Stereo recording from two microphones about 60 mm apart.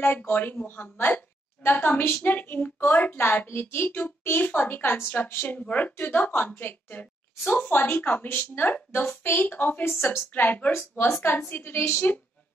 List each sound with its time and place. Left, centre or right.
0.0 s a woman's voice: left